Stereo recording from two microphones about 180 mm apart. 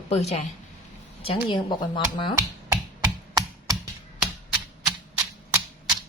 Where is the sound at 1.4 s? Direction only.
25° left (ahead or behind).